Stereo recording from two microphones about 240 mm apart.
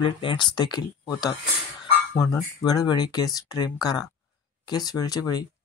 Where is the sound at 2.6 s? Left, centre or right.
Centre.